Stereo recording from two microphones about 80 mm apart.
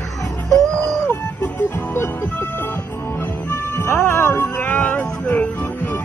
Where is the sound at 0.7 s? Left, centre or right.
Centre.